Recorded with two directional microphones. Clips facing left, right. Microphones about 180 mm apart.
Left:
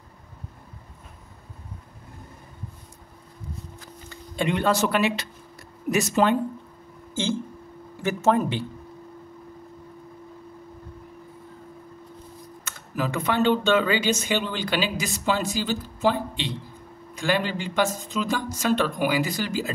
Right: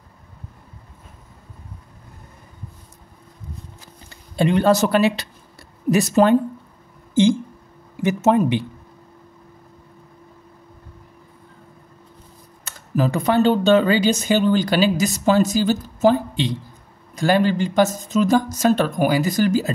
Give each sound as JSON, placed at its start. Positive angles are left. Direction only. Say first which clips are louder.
{"t": 4.1, "sound": "speech", "louder": "right 7 dB", "side_deg": -35}
{"t": 7.2, "sound": "speech", "louder": "right 11 dB", "side_deg": -15}
{"t": 8.0, "sound": "a sound", "louder": "right 4 dB", "side_deg": -20}
{"t": 8.4, "sound": "speech", "louder": "right 6 dB", "side_deg": -15}
{"t": 12.6, "sound": "speech", "louder": "right 7 dB", "side_deg": -35}